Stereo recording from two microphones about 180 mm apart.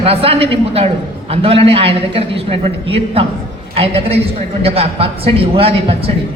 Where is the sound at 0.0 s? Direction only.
30° right (ahead or behind).